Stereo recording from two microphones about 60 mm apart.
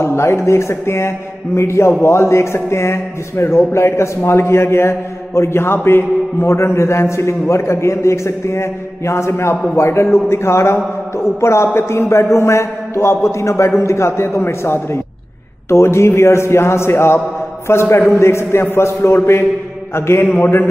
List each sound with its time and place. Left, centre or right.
0.0 s a man's voice: left